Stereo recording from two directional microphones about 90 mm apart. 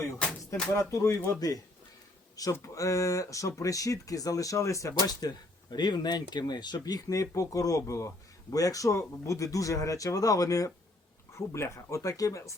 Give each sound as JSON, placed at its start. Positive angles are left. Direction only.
{"t": 0.2, "sound": "music", "side_deg": 15}
{"t": 0.7, "sound": "speech", "side_deg": 35}
{"t": 5.2, "sound": "speech", "side_deg": 45}